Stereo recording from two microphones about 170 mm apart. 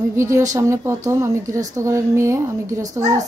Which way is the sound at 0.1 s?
15° right (ahead or behind).